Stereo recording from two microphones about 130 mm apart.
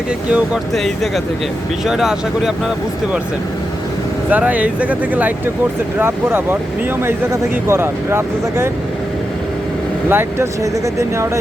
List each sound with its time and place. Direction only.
0.3 s speech: 5° right (ahead or behind)
4.3 s speech: 10° right (ahead or behind)
7.7 s speech: 20° right (ahead or behind)
10.1 s speech: 15° right (ahead or behind)